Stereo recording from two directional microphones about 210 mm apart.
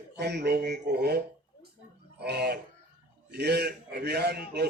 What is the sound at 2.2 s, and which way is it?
A man's voice, 50° right (ahead or behind).